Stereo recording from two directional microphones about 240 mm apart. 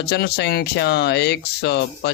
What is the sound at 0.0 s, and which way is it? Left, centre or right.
Speech, left.